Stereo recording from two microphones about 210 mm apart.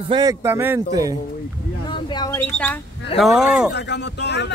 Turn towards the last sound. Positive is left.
turn(degrees=55)  # may be behind; listen again after turning